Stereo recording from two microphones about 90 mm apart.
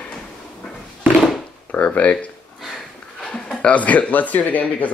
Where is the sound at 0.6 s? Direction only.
5° left (ahead or behind).